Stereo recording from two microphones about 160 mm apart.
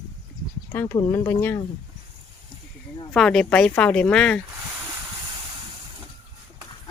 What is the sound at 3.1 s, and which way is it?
Speech, 5° left (ahead or behind).